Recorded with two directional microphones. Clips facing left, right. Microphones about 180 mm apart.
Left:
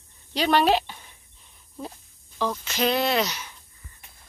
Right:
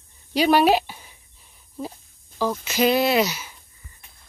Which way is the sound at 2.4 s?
10° right (ahead or behind).